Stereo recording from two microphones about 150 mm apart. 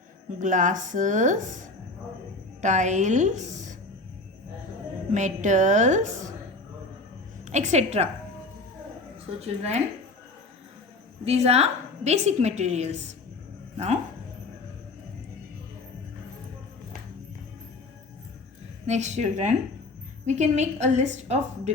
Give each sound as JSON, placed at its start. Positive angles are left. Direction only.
{"t": 0.3, "sound": "a woman's voice", "side_deg": -55}
{"t": 5.1, "sound": "a woman's voice", "side_deg": -55}
{"t": 7.4, "sound": "a woman's voice", "side_deg": -50}
{"t": 9.4, "sound": "a woman's voice", "side_deg": -45}
{"t": 11.3, "sound": "a woman's voice", "side_deg": -45}
{"t": 18.9, "sound": "a woman's voice", "side_deg": -50}